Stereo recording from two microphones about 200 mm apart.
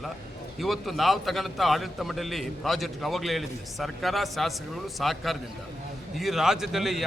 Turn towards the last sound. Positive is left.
turn(degrees=0)  # may be behind; listen again after turning